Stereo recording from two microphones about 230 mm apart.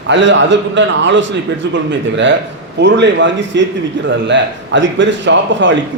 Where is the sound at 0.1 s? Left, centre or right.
Right.